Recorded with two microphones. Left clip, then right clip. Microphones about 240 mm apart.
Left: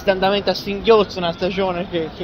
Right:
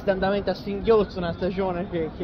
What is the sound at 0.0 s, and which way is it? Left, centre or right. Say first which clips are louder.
Speech: left 6 dB; centre.